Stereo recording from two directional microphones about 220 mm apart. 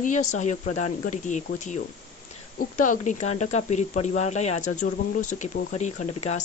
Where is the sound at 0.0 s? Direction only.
35° left (ahead or behind).